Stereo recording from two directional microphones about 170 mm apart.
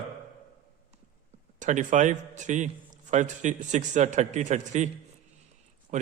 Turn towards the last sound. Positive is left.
turn(degrees=-45)  # may be behind; listen again after turning